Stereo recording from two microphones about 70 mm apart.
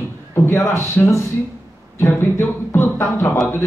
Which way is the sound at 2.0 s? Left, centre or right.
Left.